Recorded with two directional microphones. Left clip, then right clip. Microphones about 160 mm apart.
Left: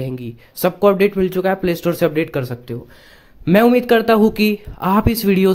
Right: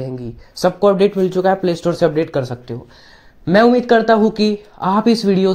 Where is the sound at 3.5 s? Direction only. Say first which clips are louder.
Right 1 dB; 30° left (ahead or behind).